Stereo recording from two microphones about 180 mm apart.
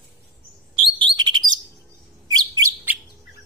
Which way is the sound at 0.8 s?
25° right (ahead or behind).